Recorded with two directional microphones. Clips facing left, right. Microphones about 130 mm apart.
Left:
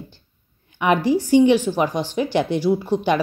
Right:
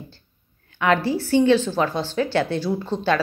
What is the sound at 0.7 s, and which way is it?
A woman's voice, 15° left (ahead or behind).